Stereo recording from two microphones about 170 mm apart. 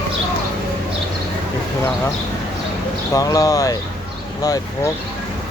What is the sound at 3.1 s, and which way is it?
Speech, 20° left (ahead or behind).